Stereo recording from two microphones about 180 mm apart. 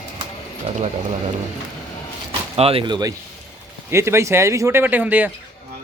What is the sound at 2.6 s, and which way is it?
A man's voice, 30° right (ahead or behind).